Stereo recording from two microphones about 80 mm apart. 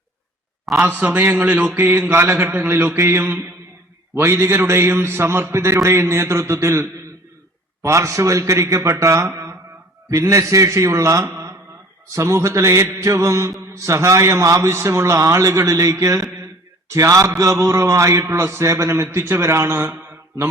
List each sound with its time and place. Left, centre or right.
0.8 s mantra: right
4.1 s a man's voice: right